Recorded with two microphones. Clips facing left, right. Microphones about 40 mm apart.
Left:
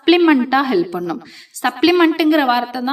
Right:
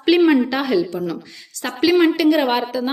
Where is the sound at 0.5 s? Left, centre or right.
Centre.